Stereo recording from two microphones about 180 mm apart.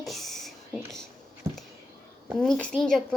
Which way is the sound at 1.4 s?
15° right (ahead or behind).